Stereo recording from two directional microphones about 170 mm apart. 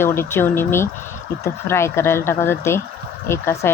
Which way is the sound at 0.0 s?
15° left (ahead or behind).